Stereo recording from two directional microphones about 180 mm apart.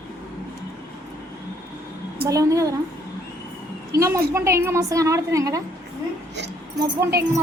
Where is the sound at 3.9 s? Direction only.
15° right (ahead or behind).